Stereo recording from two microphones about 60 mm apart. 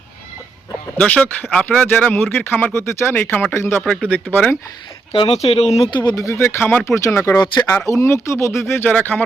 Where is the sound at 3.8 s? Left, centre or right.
Centre.